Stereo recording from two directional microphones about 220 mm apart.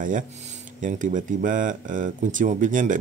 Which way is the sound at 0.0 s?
35° right (ahead or behind).